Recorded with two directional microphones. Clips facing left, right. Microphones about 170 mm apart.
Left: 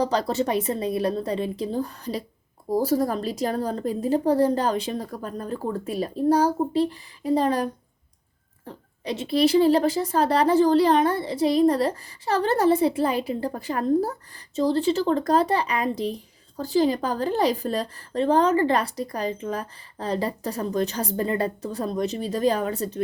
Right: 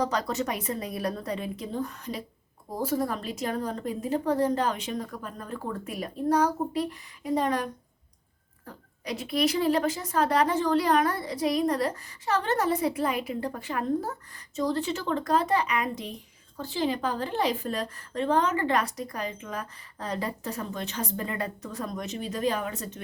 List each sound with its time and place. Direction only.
0.0 s a woman's voice: 30° left (ahead or behind)